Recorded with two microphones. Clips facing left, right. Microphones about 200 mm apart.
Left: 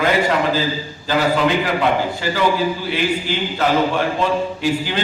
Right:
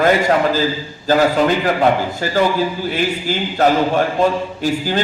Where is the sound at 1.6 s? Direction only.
45° right (ahead or behind).